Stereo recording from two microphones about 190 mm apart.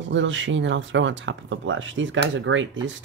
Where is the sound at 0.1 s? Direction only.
75° right (ahead or behind).